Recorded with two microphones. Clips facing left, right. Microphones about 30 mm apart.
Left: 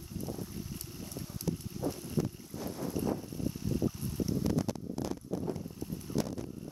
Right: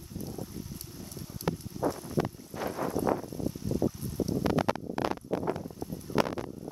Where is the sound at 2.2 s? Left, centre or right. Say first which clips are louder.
Right 4 dB; right.